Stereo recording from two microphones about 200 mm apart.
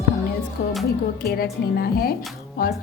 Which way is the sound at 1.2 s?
50° left (ahead or behind).